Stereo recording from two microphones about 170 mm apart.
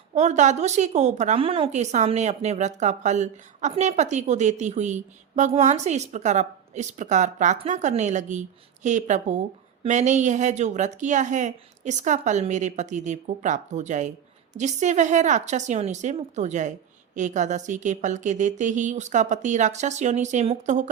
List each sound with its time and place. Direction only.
0.1 s a woman's voice: 40° right (ahead or behind)